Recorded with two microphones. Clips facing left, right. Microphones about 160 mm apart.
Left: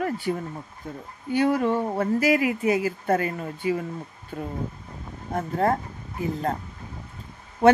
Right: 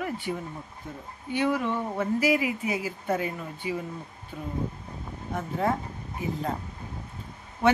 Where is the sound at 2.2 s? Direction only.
55° left (ahead or behind).